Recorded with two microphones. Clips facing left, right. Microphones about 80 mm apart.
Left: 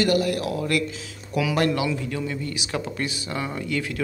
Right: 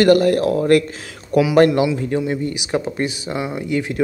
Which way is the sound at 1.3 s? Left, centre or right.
Right.